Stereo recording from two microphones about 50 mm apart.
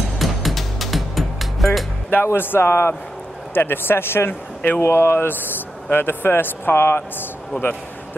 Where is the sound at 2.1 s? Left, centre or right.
Left.